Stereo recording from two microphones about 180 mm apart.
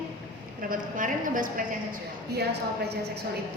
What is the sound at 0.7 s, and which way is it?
Speech, 50° right (ahead or behind).